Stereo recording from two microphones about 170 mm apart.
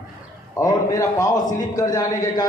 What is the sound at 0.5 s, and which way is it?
A man's voice, 20° left (ahead or behind).